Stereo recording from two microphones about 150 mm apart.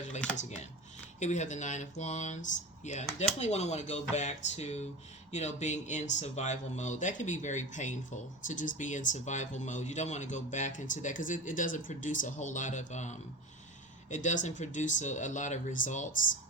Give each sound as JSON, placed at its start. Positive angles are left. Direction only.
{"t": 0.3, "sound": "speech", "side_deg": 50}